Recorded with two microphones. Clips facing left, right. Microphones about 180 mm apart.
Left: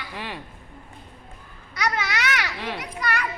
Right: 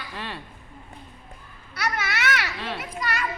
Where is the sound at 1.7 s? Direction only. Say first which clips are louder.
Left 2 dB; 15° left (ahead or behind).